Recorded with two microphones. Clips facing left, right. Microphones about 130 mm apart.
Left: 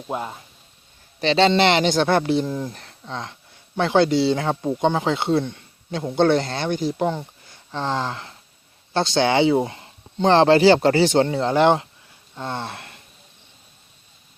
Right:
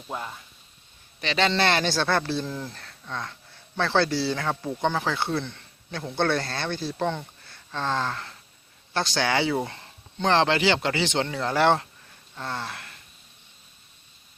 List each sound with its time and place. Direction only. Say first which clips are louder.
0.1 s speech: left 6 dB; 25° left (ahead or behind)
10.2 s speech: left 7 dB; 35° left (ahead or behind)
11.3 s speech: left 5 dB; 25° left (ahead or behind)
12.3 s a sound: left 4 dB; 20° left (ahead or behind)